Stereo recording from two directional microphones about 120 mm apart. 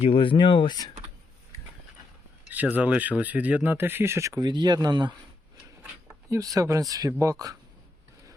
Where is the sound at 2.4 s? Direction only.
15° right (ahead or behind).